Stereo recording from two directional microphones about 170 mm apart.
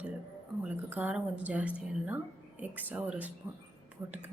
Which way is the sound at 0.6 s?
10° right (ahead or behind).